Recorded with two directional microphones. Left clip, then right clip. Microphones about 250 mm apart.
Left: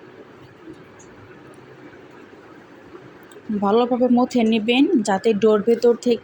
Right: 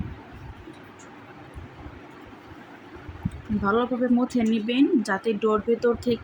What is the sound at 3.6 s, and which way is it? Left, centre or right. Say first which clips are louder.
Speech: left 6 dB; centre.